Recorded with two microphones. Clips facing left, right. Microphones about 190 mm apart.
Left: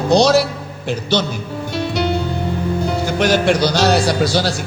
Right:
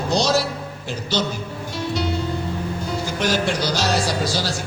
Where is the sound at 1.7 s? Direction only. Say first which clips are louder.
Left 5 dB; 65° left (ahead or behind).